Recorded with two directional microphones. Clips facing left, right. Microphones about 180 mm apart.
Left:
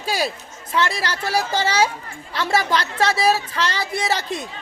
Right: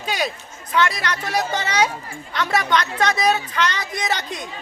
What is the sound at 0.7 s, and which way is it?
A woman's voice, 30° left (ahead or behind).